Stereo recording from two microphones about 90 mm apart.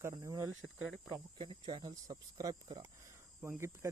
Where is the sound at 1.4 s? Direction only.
60° right (ahead or behind).